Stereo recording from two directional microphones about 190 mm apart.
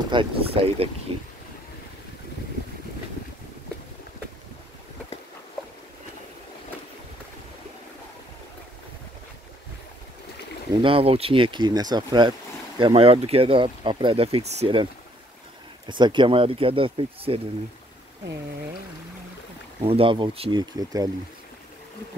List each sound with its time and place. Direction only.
0.1 s speech: 25° right (ahead or behind)
10.7 s speech: 25° right (ahead or behind)
15.9 s speech: 25° right (ahead or behind)
19.8 s speech: 30° right (ahead or behind)